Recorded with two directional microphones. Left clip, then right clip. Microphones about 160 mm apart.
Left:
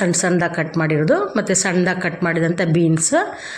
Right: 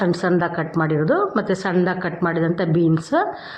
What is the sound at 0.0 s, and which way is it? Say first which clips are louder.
A woman's voice: left 1 dB; 20° left (ahead or behind).